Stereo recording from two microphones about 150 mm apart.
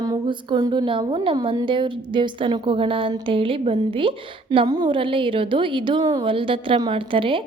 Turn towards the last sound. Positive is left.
turn(degrees=-35)  # may be behind; listen again after turning